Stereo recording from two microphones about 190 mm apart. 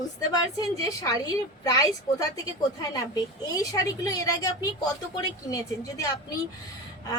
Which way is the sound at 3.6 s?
20° left (ahead or behind).